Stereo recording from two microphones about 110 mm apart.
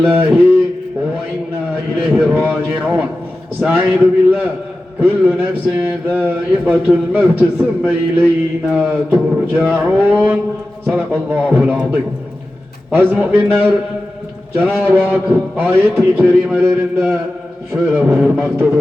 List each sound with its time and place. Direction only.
0.1 s a man's voice: 15° right (ahead or behind)
2.2 s a man's voice: 15° right (ahead or behind)
13.0 s a man's voice: 15° right (ahead or behind)